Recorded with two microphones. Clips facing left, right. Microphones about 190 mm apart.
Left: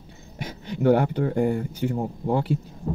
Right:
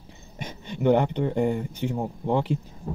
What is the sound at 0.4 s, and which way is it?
Speech, 10° left (ahead or behind).